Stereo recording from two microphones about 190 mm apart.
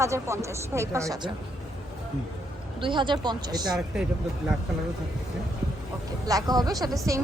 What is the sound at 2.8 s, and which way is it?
Speech, 25° right (ahead or behind).